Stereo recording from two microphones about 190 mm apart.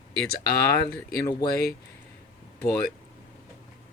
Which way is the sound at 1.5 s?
55° left (ahead or behind).